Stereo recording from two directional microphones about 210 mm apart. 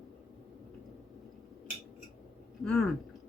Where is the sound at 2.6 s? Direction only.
Centre (ahead or behind).